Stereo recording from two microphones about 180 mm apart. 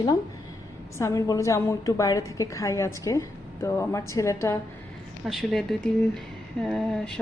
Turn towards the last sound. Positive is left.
turn(degrees=5)  # may be behind; listen again after turning